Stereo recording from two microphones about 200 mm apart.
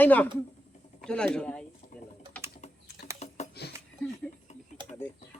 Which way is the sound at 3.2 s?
35° left (ahead or behind).